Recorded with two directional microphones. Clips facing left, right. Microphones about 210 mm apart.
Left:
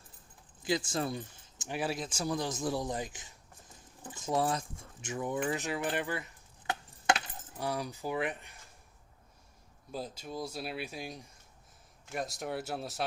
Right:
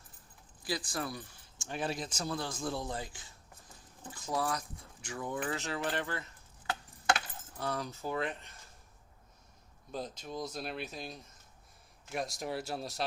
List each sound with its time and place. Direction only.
0.6 s speech: 25° left (ahead or behind)
9.9 s speech: 5° left (ahead or behind)
12.0 s speech: centre (ahead or behind)